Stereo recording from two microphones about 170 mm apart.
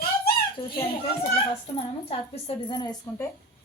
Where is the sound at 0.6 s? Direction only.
30° left (ahead or behind).